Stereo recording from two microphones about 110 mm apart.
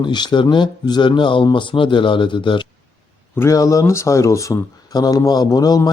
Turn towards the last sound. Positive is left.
turn(degrees=35)  # may be behind; listen again after turning